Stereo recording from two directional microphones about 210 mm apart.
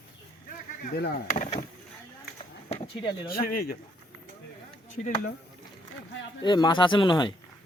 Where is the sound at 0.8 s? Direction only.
45° left (ahead or behind).